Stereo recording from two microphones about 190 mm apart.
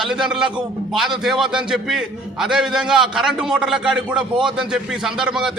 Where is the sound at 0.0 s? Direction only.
5° right (ahead or behind).